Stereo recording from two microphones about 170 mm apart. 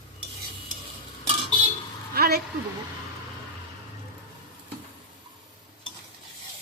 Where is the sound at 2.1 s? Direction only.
65° right (ahead or behind).